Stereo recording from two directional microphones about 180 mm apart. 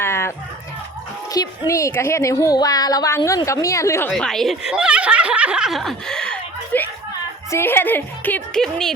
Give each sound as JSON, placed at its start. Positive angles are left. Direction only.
{"t": 0.0, "sound": "a sound", "side_deg": 15}
{"t": 1.3, "sound": "a woman's voice", "side_deg": 20}
{"t": 4.1, "sound": "a woman's voice", "side_deg": 0}